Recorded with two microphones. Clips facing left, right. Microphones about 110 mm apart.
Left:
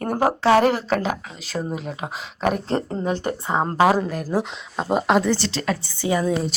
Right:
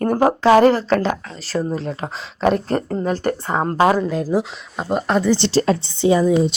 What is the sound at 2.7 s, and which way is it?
Speech, 25° left (ahead or behind).